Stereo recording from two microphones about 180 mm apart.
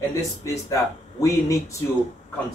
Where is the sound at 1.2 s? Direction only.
15° left (ahead or behind).